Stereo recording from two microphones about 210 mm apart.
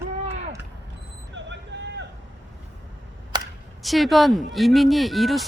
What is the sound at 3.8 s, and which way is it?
Speech, centre (ahead or behind).